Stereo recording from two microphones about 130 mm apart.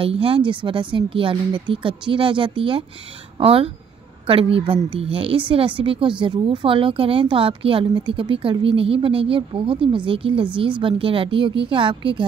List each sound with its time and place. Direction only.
0.0 s a woman's voice: 45° right (ahead or behind)